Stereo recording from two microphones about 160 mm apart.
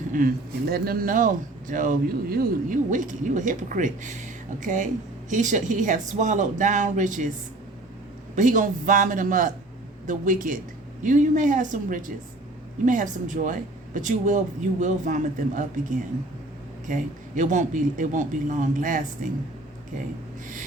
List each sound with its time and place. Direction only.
0.1 s speech: 60° right (ahead or behind)
8.4 s speech: 55° right (ahead or behind)
16.9 s speech: 50° right (ahead or behind)